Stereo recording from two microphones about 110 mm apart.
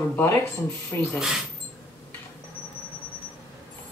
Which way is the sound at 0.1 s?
20° left (ahead or behind).